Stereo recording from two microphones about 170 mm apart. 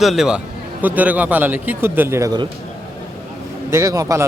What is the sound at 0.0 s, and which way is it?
A man's voice, centre (ahead or behind).